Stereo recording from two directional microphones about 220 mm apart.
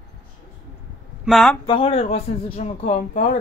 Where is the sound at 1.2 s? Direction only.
Centre (ahead or behind).